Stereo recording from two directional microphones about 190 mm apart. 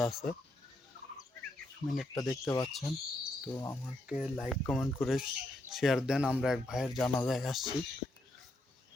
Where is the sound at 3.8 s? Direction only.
5° right (ahead or behind).